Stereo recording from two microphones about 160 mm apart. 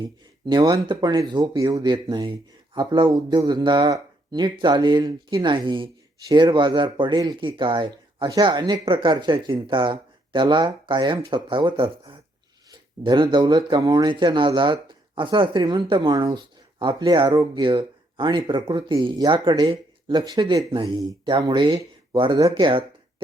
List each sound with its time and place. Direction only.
0.0 s speech: 25° right (ahead or behind)